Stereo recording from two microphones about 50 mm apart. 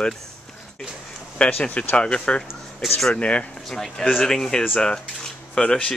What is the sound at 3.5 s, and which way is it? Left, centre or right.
Speech, centre.